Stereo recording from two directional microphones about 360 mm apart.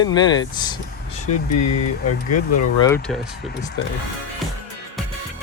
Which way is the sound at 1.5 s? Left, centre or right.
Left.